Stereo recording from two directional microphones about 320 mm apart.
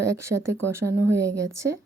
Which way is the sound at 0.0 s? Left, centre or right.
Right.